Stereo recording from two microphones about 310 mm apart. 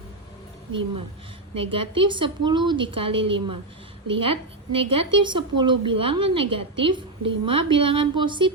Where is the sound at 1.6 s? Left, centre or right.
Centre.